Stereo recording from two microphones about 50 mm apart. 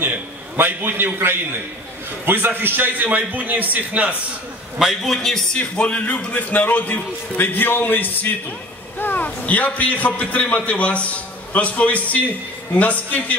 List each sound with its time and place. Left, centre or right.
0.0 s a man's voice: right
4.7 s a man's voice: centre
5.6 s a man's voice: left